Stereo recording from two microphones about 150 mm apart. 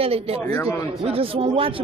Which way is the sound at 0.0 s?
40° right (ahead or behind).